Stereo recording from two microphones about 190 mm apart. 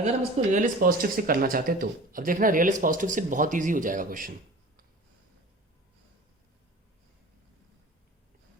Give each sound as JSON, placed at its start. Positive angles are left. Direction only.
{"t": 0.3, "sound": "speech", "side_deg": -40}